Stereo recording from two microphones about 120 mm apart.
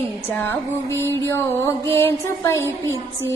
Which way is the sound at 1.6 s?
25° left (ahead or behind).